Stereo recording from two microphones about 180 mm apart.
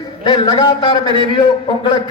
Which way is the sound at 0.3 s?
25° left (ahead or behind).